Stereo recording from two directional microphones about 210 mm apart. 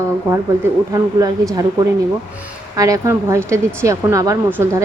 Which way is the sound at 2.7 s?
15° right (ahead or behind).